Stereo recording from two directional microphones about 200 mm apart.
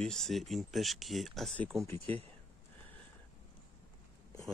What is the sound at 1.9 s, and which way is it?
Speech, 30° right (ahead or behind).